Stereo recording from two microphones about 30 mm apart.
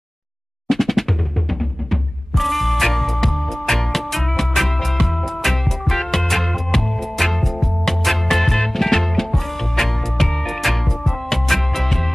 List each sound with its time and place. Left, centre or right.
0.7 s music: centre